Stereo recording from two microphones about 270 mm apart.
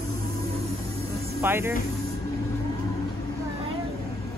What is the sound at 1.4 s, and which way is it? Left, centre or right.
Music, centre.